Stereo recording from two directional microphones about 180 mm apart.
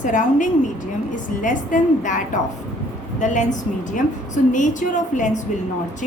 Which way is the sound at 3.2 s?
45° left (ahead or behind).